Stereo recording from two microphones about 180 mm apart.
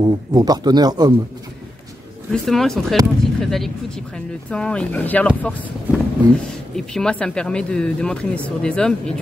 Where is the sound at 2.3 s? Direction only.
Centre (ahead or behind).